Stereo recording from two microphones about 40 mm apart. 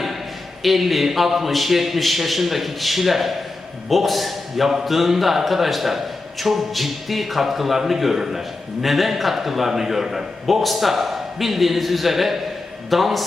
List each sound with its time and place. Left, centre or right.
0.6 s a man's voice: centre